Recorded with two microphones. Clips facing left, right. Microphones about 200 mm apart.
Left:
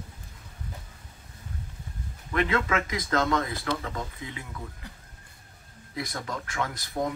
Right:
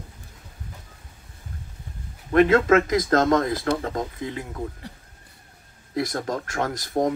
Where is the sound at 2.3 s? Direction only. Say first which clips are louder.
Right 10 dB; 45° right (ahead or behind).